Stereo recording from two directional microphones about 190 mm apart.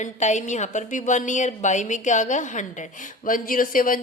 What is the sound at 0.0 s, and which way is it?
A woman's voice, 40° left (ahead or behind).